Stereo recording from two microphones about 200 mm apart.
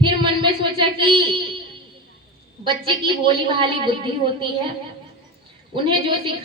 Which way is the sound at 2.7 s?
25° right (ahead or behind).